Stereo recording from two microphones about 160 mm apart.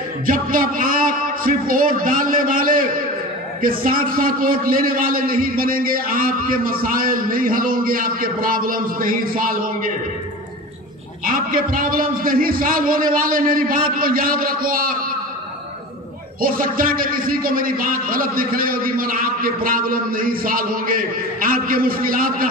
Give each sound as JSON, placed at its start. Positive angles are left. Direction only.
{"t": 0.3, "sound": "a sound", "side_deg": -60}
{"t": 3.6, "sound": "a man's voice", "side_deg": -65}
{"t": 11.2, "sound": "a man's voice", "side_deg": -60}
{"t": 16.3, "sound": "a man's voice", "side_deg": -65}